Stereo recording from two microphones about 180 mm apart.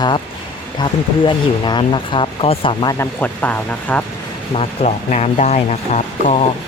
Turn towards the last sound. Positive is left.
turn(degrees=40)  # may be behind; listen again after turning